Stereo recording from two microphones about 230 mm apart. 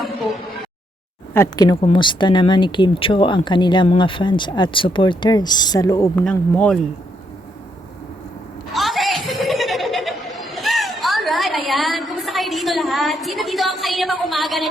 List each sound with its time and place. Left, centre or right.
0.0 s a sound: centre
1.3 s speech: centre
8.7 s chuckle: centre